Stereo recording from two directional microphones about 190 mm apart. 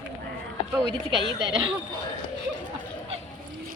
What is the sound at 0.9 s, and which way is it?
Speech, 25° right (ahead or behind).